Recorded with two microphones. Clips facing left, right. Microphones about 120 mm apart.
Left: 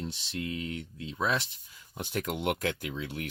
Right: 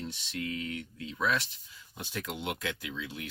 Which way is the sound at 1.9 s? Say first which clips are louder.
Left 5 dB; 50° left (ahead or behind).